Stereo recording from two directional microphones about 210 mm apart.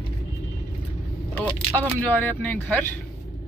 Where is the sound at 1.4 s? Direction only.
10° left (ahead or behind).